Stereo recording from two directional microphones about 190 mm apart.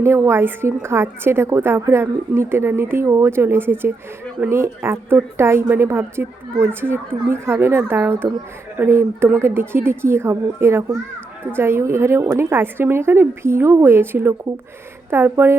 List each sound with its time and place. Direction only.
0.0 s a woman's voice: 15° right (ahead or behind)